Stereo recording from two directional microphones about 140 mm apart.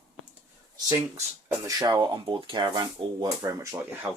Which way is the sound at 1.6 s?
25° right (ahead or behind).